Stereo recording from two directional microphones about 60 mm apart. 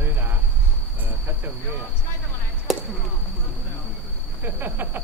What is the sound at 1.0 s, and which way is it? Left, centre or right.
Cricket, right.